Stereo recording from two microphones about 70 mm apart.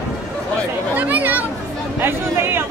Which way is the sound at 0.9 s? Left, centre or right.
Right.